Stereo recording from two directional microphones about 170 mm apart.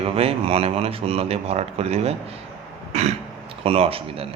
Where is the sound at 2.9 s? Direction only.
40° right (ahead or behind).